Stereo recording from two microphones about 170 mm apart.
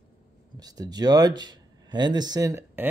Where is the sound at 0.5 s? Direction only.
20° right (ahead or behind).